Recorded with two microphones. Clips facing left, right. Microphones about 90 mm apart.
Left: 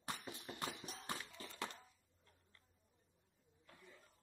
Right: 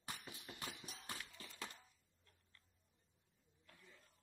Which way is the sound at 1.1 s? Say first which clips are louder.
Left 4 dB; 20° left (ahead or behind).